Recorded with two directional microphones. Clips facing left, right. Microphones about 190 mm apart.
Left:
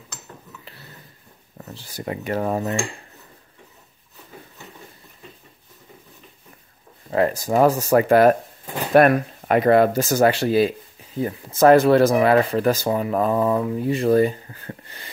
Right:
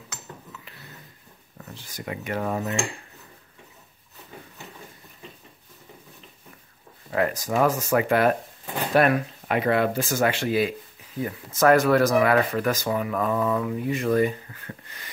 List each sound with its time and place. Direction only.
1.7 s speech: 30° left (ahead or behind)
7.1 s speech: 30° left (ahead or behind)